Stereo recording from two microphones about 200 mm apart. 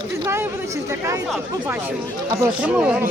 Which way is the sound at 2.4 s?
5° right (ahead or behind).